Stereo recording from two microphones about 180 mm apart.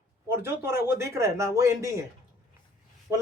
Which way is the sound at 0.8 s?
15° right (ahead or behind).